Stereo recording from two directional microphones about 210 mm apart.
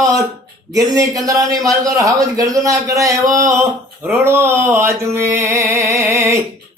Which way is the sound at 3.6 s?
Centre (ahead or behind).